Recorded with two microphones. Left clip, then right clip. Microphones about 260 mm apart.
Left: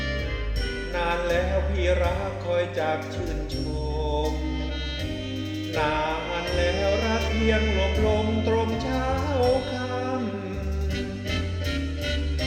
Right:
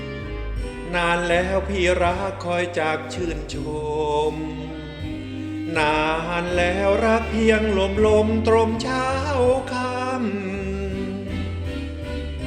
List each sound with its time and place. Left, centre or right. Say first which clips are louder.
0.9 s music: right 5 dB; right
5.7 s music: right 5 dB; right